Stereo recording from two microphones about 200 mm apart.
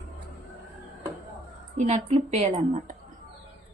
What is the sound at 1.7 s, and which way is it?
Speech, 35° right (ahead or behind).